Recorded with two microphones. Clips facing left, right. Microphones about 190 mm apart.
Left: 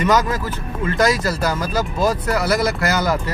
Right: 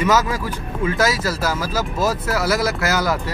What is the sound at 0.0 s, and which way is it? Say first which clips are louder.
Speech: left 1 dB; 5° right (ahead or behind).